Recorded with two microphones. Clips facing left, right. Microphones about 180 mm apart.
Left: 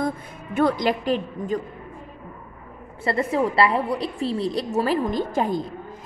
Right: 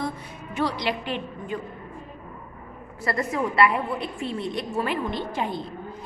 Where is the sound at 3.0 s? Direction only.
30° left (ahead or behind).